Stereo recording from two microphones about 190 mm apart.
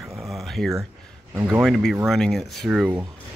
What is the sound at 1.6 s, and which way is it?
Speech, centre (ahead or behind).